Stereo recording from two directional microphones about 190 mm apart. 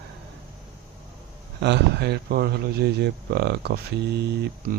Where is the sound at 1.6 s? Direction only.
65° right (ahead or behind).